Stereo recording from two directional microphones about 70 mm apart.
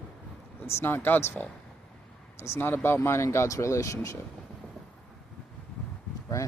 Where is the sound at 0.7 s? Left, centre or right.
Left.